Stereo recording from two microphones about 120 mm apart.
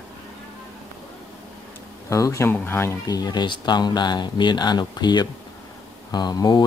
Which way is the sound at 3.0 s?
35° left (ahead or behind).